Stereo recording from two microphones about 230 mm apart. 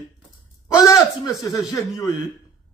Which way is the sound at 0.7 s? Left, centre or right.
Centre.